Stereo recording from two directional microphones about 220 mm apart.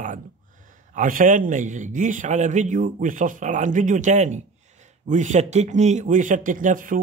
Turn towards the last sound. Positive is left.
turn(degrees=-35)  # may be behind; listen again after turning